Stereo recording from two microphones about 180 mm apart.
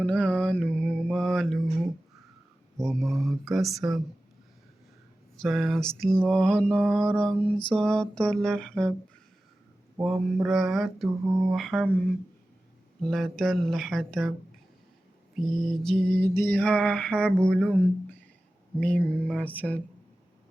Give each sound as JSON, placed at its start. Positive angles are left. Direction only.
{"t": 0.0, "sound": "mantra", "side_deg": 5}
{"t": 2.8, "sound": "mantra", "side_deg": 0}
{"t": 5.4, "sound": "mantra", "side_deg": 0}
{"t": 10.0, "sound": "mantra", "side_deg": 0}
{"t": 13.0, "sound": "mantra", "side_deg": 5}
{"t": 15.4, "sound": "lullaby", "side_deg": 0}